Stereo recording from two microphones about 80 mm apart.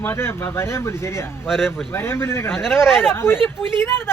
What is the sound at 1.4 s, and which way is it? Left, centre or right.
Speech, centre.